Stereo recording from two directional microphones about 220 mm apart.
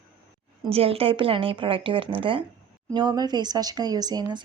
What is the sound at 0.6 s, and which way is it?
Speech, 25° right (ahead or behind).